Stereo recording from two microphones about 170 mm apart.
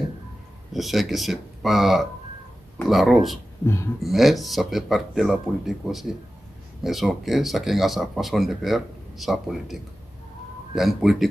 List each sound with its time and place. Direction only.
0.7 s speech: centre (ahead or behind)
3.6 s speech: 15° left (ahead or behind)
4.0 s speech: centre (ahead or behind)